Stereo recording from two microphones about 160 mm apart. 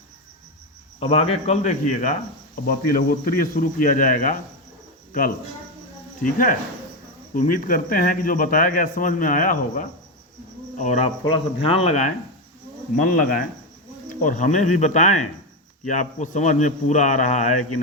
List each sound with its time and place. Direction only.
0.9 s cricket: 40° left (ahead or behind)
2.6 s speech: 65° left (ahead or behind)
6.2 s speech: 55° left (ahead or behind)
11.2 s cricket: 35° left (ahead or behind)
13.0 s speech: 60° left (ahead or behind)